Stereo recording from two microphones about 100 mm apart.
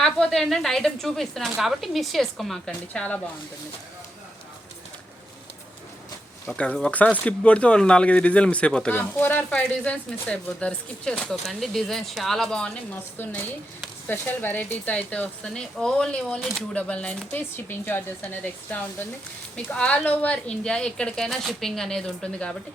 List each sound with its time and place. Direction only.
0.0 s speech: 5° left (ahead or behind)
2.9 s speech: 10° left (ahead or behind)
6.9 s speech: 15° left (ahead or behind)
14.1 s speech: 20° left (ahead or behind)